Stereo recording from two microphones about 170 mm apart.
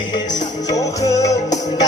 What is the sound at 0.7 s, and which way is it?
Music, 20° left (ahead or behind).